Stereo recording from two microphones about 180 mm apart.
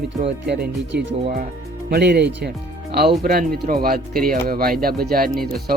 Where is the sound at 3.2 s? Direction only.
55° right (ahead or behind).